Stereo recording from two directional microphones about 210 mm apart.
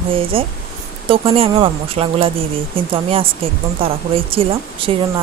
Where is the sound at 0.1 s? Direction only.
25° right (ahead or behind).